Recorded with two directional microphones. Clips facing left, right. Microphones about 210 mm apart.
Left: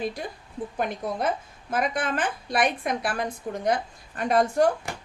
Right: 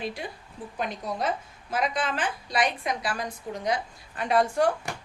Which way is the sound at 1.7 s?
50° left (ahead or behind).